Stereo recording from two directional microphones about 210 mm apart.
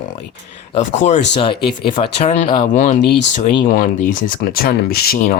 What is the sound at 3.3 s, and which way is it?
Speech, 30° left (ahead or behind).